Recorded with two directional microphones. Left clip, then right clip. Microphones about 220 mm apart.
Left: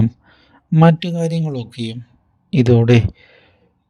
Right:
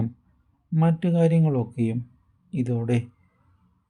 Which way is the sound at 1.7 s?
40° left (ahead or behind).